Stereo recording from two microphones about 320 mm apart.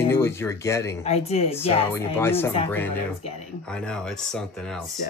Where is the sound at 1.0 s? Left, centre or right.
Centre.